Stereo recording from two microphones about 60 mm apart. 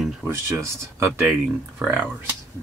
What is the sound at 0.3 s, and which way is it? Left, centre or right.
Speech, right.